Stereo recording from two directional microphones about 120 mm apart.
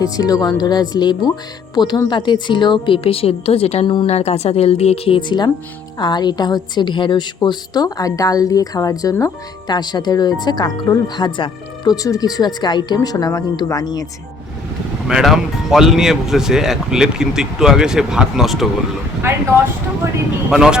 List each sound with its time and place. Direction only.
0.0 s a woman's voice: 30° left (ahead or behind)
12.0 s a woman's voice: 30° left (ahead or behind)
15.0 s speech: 5° right (ahead or behind)
19.3 s speech: 20° right (ahead or behind)
20.5 s speech: 5° right (ahead or behind)